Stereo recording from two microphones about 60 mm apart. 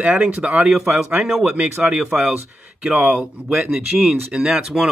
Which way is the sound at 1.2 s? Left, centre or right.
Centre.